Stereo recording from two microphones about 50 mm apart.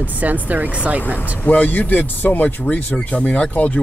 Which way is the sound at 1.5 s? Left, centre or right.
Left.